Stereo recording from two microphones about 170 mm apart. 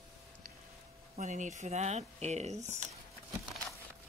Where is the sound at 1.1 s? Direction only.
45° right (ahead or behind).